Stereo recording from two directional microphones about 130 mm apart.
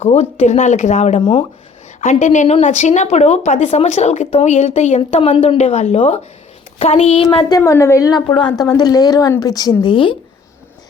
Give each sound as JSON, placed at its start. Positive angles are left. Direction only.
{"t": 0.0, "sound": "speech", "side_deg": 60}
{"t": 1.2, "sound": "speech", "side_deg": 40}
{"t": 2.0, "sound": "a woman's voice", "side_deg": 65}
{"t": 7.5, "sound": "a woman's voice", "side_deg": 25}